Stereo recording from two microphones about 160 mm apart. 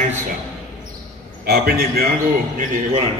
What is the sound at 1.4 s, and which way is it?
Speech, 85° right.